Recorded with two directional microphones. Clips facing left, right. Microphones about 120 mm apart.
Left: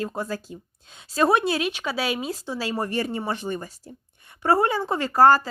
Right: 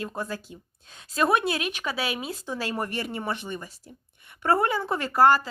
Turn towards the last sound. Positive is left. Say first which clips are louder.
# left 3 dB
turn(degrees=35)  # may be behind; listen again after turning